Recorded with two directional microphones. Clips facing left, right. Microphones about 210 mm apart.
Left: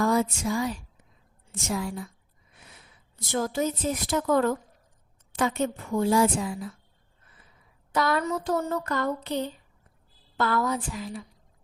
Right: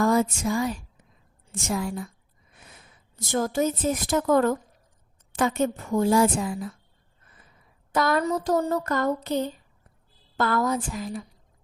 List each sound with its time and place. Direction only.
0.0 s a woman's voice: 45° right (ahead or behind)
7.9 s a woman's voice: 45° right (ahead or behind)
8.2 s a sound: 40° right (ahead or behind)
10.3 s a woman's voice: 45° right (ahead or behind)